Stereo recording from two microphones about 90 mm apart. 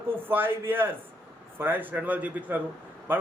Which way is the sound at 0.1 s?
25° right (ahead or behind).